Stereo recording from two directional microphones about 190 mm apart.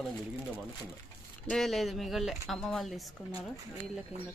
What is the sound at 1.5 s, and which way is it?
Speech, centre (ahead or behind).